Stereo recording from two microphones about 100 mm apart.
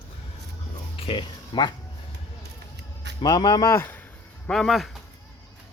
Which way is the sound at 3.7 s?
20° left (ahead or behind).